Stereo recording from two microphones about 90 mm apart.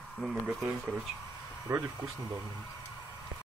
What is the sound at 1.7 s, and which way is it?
Speech, 25° right (ahead or behind).